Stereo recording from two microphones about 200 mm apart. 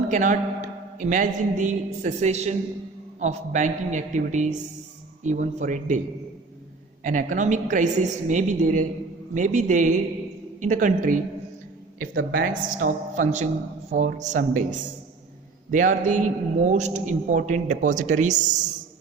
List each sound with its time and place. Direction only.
0.1 s a man's voice: 40° right (ahead or behind)
7.0 s a man's voice: 40° right (ahead or behind)